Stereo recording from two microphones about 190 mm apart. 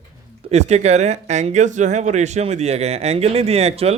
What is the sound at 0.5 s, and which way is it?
Speech, 35° right (ahead or behind).